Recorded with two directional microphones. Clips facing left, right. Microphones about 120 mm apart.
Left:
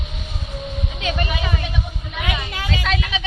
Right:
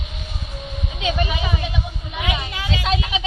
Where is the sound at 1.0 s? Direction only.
10° right (ahead or behind).